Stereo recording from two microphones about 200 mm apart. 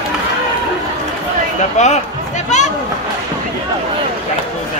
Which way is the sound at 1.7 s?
35° left (ahead or behind).